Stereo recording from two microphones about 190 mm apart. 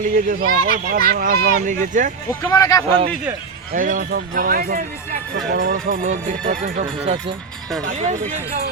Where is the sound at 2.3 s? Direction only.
15° left (ahead or behind).